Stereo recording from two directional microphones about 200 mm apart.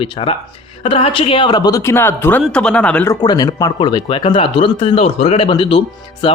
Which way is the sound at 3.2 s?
20° left (ahead or behind).